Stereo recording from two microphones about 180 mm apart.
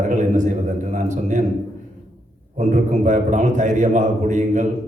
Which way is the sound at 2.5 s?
40° right (ahead or behind).